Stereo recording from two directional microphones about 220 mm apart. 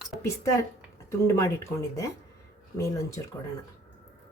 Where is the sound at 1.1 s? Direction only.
15° left (ahead or behind).